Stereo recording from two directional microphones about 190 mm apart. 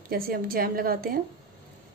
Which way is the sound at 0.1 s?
50° right (ahead or behind).